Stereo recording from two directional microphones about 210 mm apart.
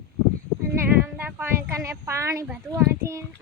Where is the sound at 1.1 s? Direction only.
10° right (ahead or behind).